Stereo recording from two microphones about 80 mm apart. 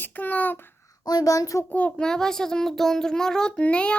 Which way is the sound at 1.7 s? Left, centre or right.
Centre.